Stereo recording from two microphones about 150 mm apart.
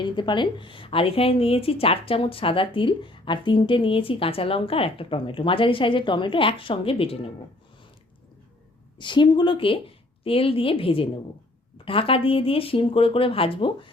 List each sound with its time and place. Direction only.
0.0 s a woman's voice: 30° left (ahead or behind)
9.0 s a woman's voice: 30° left (ahead or behind)